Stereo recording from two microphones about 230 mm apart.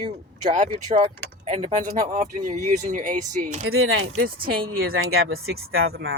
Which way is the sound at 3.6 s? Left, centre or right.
Right.